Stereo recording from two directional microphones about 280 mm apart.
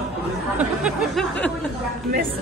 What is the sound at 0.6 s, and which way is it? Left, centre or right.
Speech, centre.